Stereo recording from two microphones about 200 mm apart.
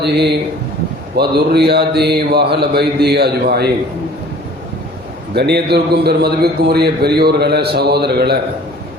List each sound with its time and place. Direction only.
0.0 s a man's voice: 55° right (ahead or behind)
5.3 s a man's voice: 55° right (ahead or behind)